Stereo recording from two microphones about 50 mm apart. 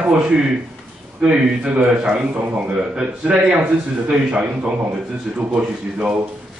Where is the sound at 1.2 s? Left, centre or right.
Right.